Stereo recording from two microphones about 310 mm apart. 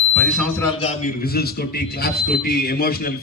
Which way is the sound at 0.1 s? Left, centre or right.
Centre.